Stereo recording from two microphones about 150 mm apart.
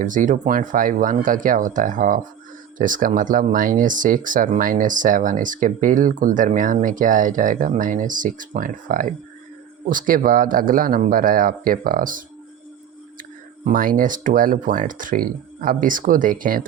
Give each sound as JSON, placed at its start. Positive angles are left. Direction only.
{"t": 0.0, "sound": "speech", "side_deg": -60}
{"t": 13.7, "sound": "speech", "side_deg": -65}